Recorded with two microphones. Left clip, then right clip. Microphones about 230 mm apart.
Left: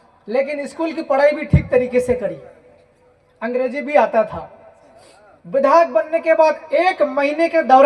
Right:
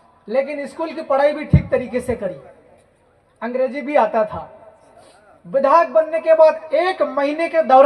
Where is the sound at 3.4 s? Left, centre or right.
Left.